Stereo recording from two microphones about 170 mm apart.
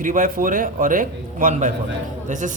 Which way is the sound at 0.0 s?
50° right (ahead or behind).